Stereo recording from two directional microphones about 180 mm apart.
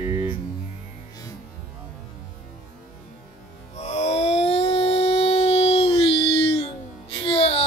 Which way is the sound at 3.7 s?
40° left (ahead or behind).